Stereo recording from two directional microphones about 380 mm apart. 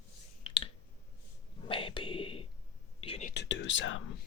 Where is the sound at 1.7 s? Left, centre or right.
Centre.